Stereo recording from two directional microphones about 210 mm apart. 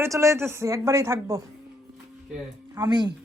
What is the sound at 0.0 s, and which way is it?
Speech, 15° right (ahead or behind).